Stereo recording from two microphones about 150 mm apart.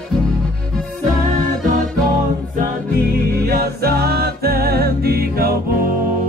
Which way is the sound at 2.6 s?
90° right.